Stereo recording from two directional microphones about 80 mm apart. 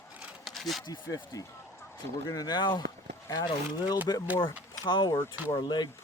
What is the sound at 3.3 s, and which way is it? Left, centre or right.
Speech, left.